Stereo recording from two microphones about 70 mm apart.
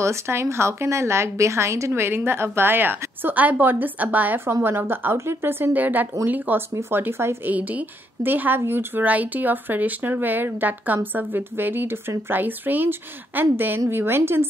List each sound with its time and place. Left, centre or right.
0.0 s a woman's voice: right
4.5 s a woman's voice: right
7.5 s a woman's voice: right